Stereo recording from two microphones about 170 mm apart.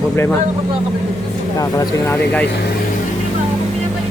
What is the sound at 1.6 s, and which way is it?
Speech, 20° left (ahead or behind).